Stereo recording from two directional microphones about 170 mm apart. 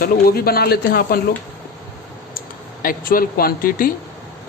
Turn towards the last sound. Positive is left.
turn(degrees=55)  # may be behind; listen again after turning